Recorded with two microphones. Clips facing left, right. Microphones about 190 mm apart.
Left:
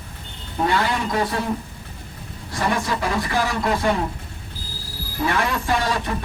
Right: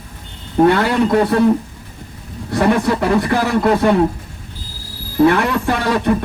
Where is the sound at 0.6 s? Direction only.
60° right (ahead or behind).